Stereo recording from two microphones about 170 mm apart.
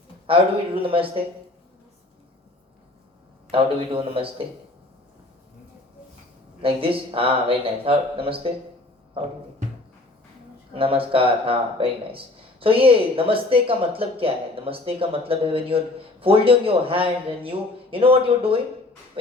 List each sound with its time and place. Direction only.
0.3 s speech: 30° right (ahead or behind)
3.5 s speech: 35° right (ahead or behind)
6.6 s speech: 35° right (ahead or behind)
10.8 s speech: 35° right (ahead or behind)